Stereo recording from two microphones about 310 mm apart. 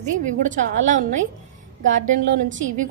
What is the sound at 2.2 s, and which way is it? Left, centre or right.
Speech, right.